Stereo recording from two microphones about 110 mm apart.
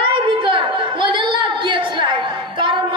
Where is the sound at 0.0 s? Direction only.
50° right (ahead or behind).